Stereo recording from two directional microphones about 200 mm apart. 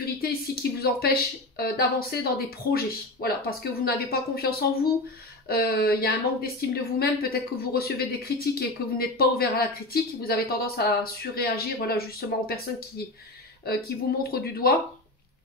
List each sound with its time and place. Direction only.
0.2 s a woman's voice: 50° left (ahead or behind)